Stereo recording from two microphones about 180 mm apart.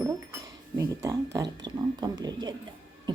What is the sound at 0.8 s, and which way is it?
Speech, 20° right (ahead or behind).